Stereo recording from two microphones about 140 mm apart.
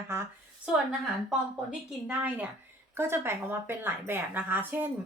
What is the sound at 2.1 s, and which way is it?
Speech, 10° right (ahead or behind).